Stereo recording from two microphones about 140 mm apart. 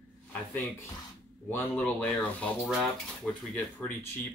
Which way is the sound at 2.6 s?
5° right (ahead or behind).